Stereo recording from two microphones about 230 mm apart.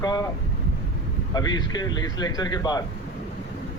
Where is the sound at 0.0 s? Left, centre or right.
Centre.